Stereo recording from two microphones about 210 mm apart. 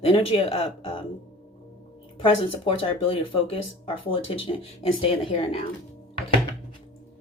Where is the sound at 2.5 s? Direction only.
25° left (ahead or behind).